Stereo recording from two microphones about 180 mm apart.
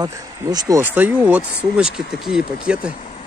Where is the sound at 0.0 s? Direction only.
20° right (ahead or behind).